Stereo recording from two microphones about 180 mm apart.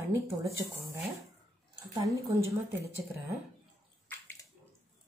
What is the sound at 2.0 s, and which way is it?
Speech, 15° right (ahead or behind).